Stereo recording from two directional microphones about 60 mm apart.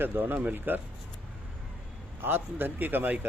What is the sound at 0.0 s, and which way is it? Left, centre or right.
Speech, right.